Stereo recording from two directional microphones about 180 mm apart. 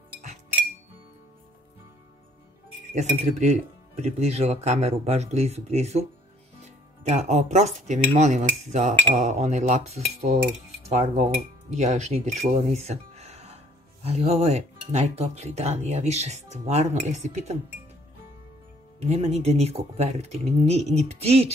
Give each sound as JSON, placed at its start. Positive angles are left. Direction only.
{"t": 2.9, "sound": "speech", "side_deg": -40}
{"t": 10.9, "sound": "cutlery", "side_deg": -40}
{"t": 11.7, "sound": "speech", "side_deg": -40}
{"t": 19.0, "sound": "speech", "side_deg": -35}